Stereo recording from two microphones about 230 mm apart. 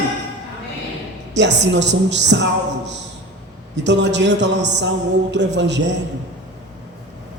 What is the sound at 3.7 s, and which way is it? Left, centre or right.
Music, right.